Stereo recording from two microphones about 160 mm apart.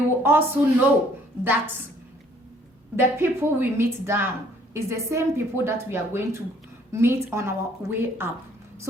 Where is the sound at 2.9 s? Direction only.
15° right (ahead or behind).